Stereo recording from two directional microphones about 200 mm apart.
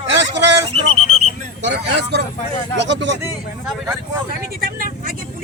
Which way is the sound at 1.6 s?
55° right (ahead or behind).